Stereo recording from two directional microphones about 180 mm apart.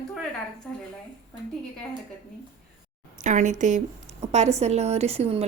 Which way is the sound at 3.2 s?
40° right (ahead or behind).